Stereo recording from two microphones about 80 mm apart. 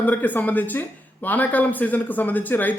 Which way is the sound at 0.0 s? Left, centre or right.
Left.